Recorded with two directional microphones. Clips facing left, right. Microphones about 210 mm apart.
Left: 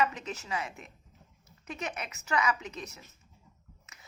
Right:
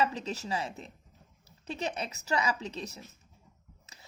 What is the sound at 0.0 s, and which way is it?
A woman's voice, 35° right (ahead or behind).